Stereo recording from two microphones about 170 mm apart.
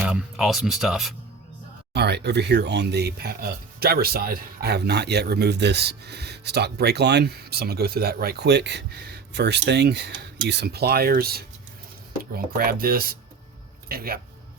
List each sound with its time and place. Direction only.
0.0 s speech: 5° right (ahead or behind)
1.9 s a man's voice: 75° right (ahead or behind)